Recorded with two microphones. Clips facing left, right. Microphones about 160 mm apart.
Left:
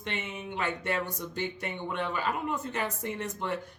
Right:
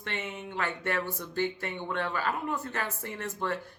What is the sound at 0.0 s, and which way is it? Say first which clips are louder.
Speech: even; 20° left (ahead or behind).